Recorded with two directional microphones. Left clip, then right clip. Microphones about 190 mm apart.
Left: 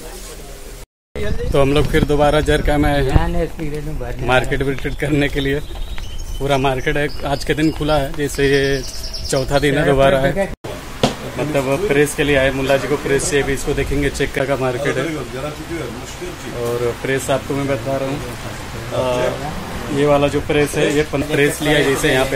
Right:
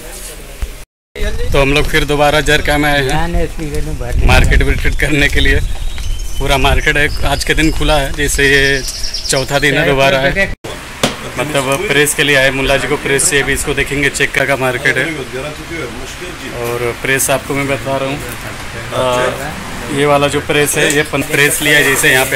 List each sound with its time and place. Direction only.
1.5 s speech: 5° left (ahead or behind)
4.3 s speech: 5° right (ahead or behind)
16.6 s speech: centre (ahead or behind)
19.0 s speech: 15° right (ahead or behind)
21.4 s speech: centre (ahead or behind)